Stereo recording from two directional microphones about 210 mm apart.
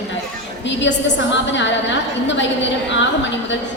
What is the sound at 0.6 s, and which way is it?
A woman's voice, 60° left (ahead or behind).